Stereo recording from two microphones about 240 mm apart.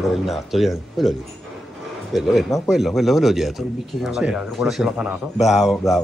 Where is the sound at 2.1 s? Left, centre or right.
Centre.